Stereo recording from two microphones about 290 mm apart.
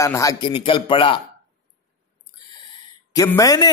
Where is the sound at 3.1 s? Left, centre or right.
Centre.